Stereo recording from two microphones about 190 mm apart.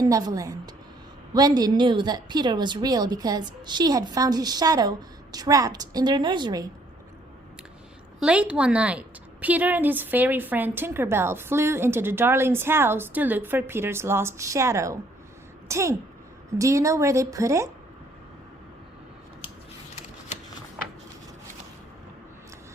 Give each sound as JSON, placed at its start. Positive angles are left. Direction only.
{"t": 0.0, "sound": "a woman's voice", "side_deg": -20}
{"t": 8.2, "sound": "a woman's voice", "side_deg": -5}